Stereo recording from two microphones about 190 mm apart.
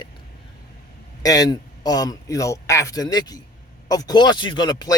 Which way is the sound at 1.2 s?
20° left (ahead or behind).